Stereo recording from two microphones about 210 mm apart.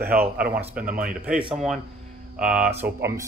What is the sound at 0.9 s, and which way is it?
Speech, 45° right (ahead or behind).